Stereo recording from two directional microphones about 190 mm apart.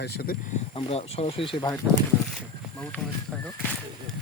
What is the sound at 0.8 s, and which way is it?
Speech, 30° left (ahead or behind).